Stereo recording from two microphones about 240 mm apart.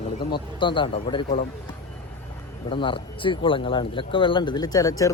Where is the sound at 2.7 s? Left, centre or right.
Left.